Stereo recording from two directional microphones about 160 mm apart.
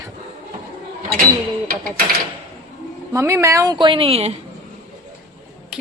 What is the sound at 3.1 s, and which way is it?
A woman's voice, 20° right (ahead or behind).